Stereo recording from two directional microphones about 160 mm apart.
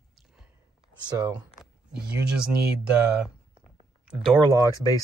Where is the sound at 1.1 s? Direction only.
25° right (ahead or behind).